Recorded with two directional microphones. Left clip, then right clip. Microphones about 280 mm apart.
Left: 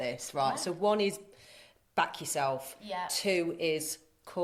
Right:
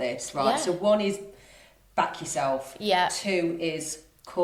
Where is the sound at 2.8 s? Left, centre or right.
Right.